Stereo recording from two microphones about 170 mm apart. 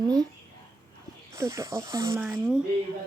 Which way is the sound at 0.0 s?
25° right (ahead or behind).